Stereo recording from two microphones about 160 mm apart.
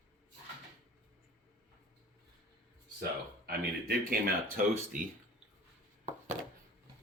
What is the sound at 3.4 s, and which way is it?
Speech, 70° right (ahead or behind).